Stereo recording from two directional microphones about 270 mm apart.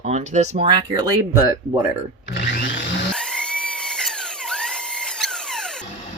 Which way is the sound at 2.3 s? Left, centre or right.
Left.